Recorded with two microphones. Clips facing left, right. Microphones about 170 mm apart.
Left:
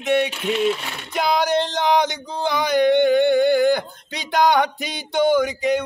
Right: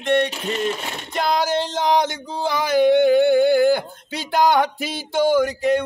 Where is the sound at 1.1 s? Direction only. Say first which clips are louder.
Left 1 dB; centre (ahead or behind).